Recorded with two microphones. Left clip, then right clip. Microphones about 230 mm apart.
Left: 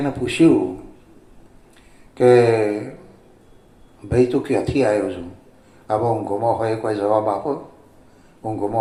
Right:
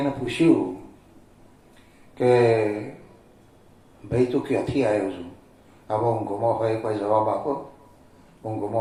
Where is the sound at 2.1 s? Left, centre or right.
Left.